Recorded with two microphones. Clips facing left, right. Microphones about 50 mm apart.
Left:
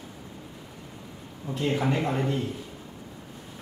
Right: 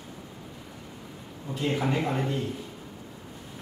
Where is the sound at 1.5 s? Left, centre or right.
Centre.